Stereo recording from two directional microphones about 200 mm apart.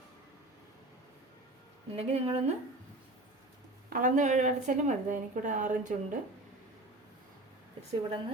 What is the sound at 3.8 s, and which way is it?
A woman's voice, 45° right (ahead or behind).